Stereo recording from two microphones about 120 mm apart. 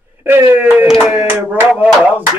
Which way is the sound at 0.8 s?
5° right (ahead or behind).